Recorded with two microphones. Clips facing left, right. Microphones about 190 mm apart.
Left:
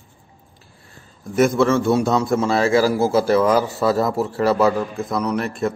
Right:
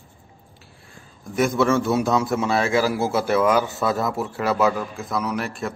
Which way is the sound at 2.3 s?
5° right (ahead or behind).